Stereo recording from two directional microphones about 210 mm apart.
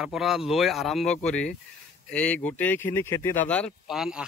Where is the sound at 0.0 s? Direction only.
Centre (ahead or behind).